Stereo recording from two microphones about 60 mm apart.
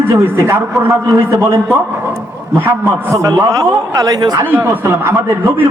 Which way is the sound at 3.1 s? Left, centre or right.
Right.